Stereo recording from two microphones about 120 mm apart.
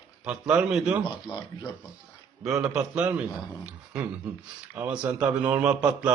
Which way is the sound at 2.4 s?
5° right (ahead or behind).